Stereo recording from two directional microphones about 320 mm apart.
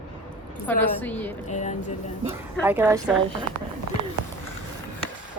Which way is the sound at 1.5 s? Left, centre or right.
Left.